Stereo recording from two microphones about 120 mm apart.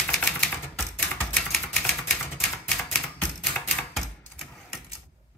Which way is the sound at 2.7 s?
5° left (ahead or behind).